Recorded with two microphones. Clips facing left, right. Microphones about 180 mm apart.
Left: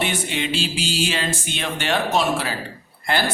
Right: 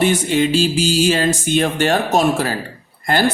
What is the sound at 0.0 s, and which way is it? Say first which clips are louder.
Speech: right 9 dB; 40° right (ahead or behind).